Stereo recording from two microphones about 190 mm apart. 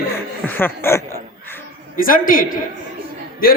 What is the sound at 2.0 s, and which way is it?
Speech, 45° left (ahead or behind).